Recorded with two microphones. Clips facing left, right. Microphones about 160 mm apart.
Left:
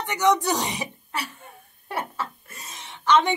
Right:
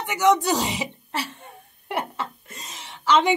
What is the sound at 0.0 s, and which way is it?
Speech, 10° right (ahead or behind).